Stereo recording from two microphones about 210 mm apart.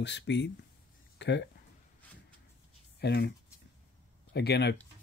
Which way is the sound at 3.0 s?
50° left (ahead or behind).